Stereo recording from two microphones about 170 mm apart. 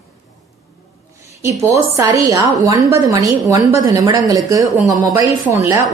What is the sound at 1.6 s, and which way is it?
A woman's voice, 20° right (ahead or behind).